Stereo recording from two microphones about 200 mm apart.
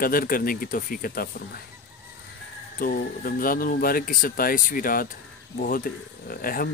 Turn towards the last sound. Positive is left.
turn(degrees=45)  # may be behind; listen again after turning